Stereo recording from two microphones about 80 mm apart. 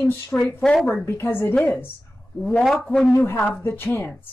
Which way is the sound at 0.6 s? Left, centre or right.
Centre.